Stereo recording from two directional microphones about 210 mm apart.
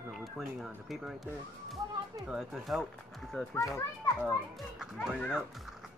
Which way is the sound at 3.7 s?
15° left (ahead or behind).